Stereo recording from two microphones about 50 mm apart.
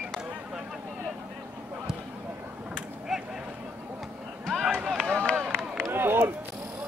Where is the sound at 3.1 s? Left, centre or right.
Centre.